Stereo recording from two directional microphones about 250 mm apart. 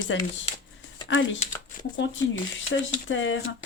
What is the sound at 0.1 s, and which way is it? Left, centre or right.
Speech, left.